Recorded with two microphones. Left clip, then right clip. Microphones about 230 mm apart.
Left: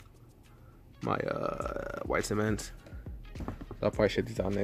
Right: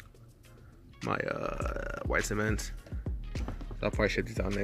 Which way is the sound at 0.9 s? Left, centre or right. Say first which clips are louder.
Left 1 dB; centre.